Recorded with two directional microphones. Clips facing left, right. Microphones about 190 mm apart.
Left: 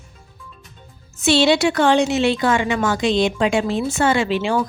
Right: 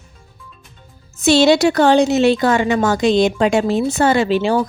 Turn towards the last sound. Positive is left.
turn(degrees=-35)  # may be behind; listen again after turning